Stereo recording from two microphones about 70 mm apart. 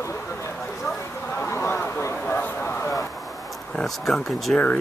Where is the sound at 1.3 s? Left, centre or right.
Left.